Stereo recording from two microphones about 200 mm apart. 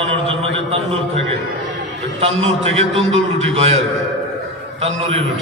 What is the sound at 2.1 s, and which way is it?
A man's voice, 30° right (ahead or behind).